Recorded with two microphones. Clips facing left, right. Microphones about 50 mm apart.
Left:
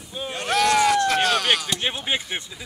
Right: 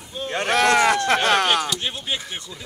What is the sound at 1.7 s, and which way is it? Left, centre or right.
Speech, left.